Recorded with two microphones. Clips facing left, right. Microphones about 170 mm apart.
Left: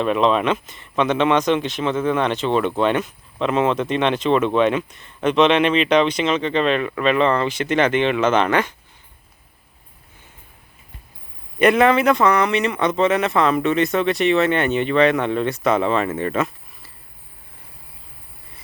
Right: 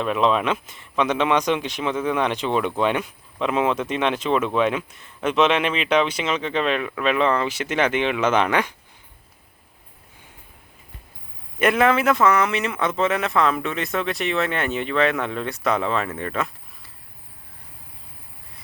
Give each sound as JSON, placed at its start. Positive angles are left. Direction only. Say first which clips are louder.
{"t": 0.0, "sound": "speech", "louder": "left 3 dB", "side_deg": -5}
{"t": 11.6, "sound": "speech", "louder": "left 4 dB", "side_deg": 0}